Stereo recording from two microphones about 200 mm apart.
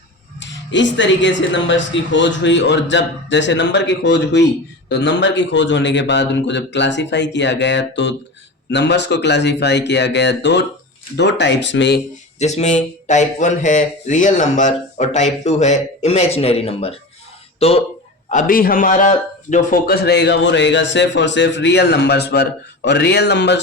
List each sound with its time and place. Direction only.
0.3 s a man's voice: 65° left (ahead or behind)
12.4 s speech: 35° left (ahead or behind)
18.3 s a man's voice: 40° left (ahead or behind); by 23.6 s 60° left (ahead or behind)